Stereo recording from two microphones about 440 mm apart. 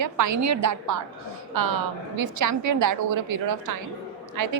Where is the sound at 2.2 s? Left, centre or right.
Right.